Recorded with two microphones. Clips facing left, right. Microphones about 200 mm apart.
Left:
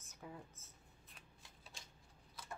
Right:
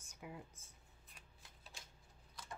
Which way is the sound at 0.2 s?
10° right (ahead or behind).